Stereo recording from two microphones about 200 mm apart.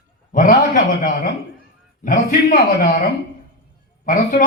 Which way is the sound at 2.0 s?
40° left (ahead or behind).